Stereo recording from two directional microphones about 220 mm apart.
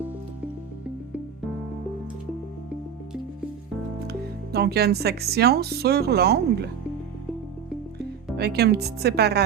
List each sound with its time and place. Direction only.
4.5 s speech: 45° right (ahead or behind)
8.4 s speech: 45° right (ahead or behind)